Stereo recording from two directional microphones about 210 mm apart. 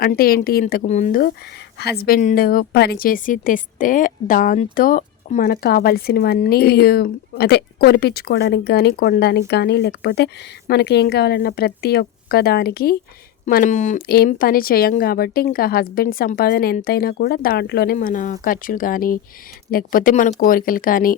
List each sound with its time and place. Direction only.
0.0 s a woman's voice: 45° left (ahead or behind)
17.9 s speech: 40° left (ahead or behind)